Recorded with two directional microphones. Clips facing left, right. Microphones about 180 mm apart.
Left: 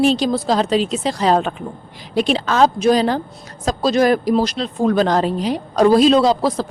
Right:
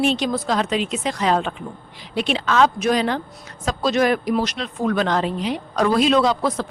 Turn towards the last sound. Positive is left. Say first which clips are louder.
# left 4 dB
turn(degrees=35)  # may be behind; listen again after turning